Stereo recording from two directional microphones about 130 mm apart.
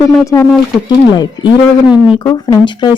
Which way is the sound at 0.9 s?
35° left (ahead or behind).